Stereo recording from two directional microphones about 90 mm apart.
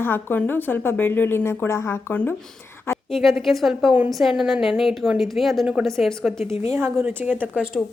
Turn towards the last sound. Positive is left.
turn(degrees=-15)  # may be behind; listen again after turning